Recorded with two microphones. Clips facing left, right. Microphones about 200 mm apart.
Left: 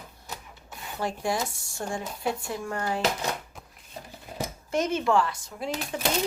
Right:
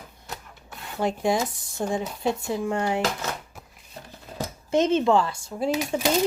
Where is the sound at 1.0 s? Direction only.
20° right (ahead or behind).